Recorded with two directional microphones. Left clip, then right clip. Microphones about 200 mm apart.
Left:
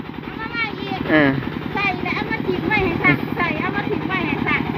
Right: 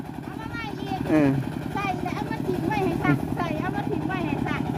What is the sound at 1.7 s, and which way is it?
Vehicle, 25° right (ahead or behind).